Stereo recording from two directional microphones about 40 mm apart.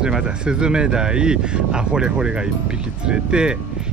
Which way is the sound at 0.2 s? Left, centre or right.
Right.